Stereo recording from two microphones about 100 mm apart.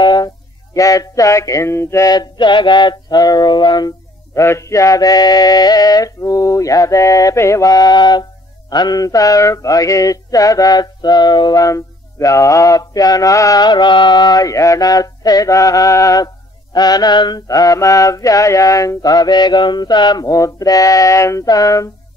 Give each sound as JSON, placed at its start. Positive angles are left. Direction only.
{"t": 0.0, "sound": "a sound", "side_deg": 45}
{"t": 0.7, "sound": "music", "side_deg": 35}
{"t": 2.0, "sound": "music", "side_deg": 45}
{"t": 4.4, "sound": "music", "side_deg": 30}
{"t": 13.7, "sound": "music", "side_deg": 50}